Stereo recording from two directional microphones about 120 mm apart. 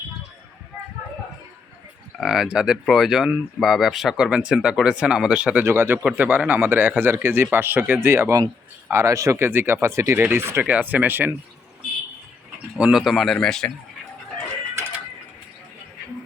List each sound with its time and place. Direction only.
2.1 s speech: centre (ahead or behind); by 11.3 s 15° right (ahead or behind)
12.7 s speech: 5° right (ahead or behind)